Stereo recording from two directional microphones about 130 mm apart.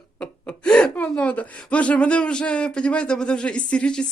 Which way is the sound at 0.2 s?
5° left (ahead or behind).